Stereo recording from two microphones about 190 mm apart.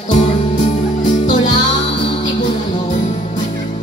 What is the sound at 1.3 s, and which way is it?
Music, 25° left (ahead or behind).